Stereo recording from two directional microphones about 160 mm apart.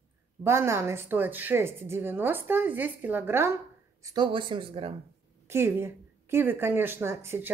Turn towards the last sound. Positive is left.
turn(degrees=-15)  # may be behind; listen again after turning